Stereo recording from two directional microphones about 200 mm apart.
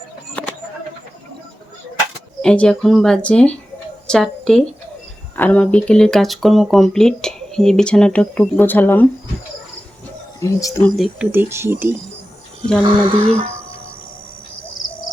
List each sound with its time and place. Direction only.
0.4 s a sound: 10° left (ahead or behind)
2.4 s speech: 5° left (ahead or behind)
4.0 s a sound: 5° left (ahead or behind)
5.4 s speech: 5° left (ahead or behind)
10.4 s speech: 15° left (ahead or behind)
10.9 s speech: 5° right (ahead or behind)
12.8 s speech: 25° right (ahead or behind)